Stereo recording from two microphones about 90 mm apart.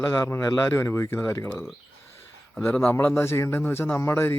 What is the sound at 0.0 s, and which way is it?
Speech, 30° left (ahead or behind).